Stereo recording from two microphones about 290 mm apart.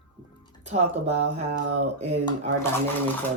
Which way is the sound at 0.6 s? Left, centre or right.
Right.